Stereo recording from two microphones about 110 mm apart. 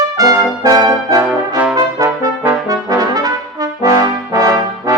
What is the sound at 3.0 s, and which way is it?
Brass instrument, 35° right (ahead or behind).